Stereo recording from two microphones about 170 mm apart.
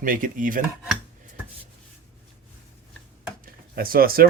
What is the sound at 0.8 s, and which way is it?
Chopping, 5° right (ahead or behind).